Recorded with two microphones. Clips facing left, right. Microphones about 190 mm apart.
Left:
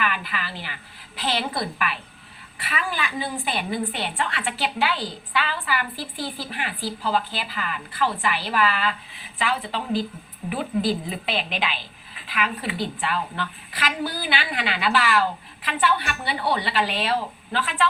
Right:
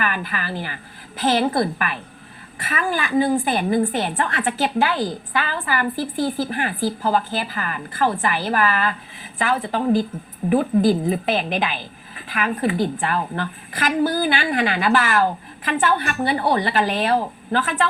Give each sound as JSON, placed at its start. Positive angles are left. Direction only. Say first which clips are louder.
{"t": 0.0, "sound": "speech", "louder": "right 3 dB", "side_deg": -45}